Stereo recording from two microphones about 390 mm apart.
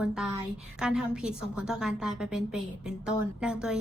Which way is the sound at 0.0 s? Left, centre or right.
Centre.